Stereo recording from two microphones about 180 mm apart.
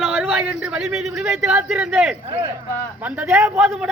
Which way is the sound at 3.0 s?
5° right (ahead or behind).